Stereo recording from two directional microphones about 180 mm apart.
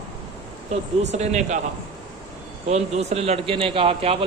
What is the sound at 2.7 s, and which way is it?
A man's voice, 35° right (ahead or behind).